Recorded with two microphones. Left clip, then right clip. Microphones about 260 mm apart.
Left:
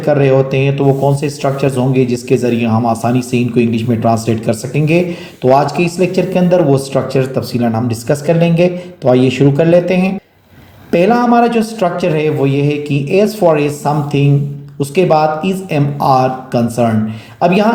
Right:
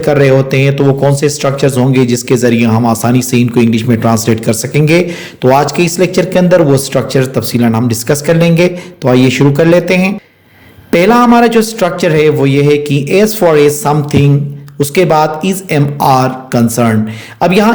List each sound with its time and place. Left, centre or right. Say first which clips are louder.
0.0 s a man's voice: right 2 dB; right